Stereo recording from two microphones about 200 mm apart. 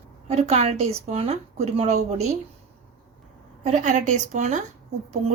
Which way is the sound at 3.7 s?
40° right (ahead or behind).